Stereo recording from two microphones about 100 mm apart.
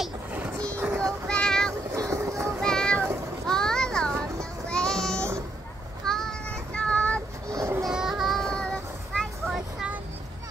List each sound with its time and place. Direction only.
0.7 s child singing: 30° right (ahead or behind)
1.3 s child singing: 5° left (ahead or behind)
2.0 s music: 35° right (ahead or behind)
2.6 s a sound: 5° left (ahead or behind)
3.4 s children playing: 5° left (ahead or behind)
4.6 s child singing: 10° left (ahead or behind)
7.5 s child singing: 30° right (ahead or behind)
7.8 s child singing: 5° right (ahead or behind)